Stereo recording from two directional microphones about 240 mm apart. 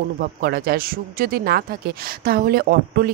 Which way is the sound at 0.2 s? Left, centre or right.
Right.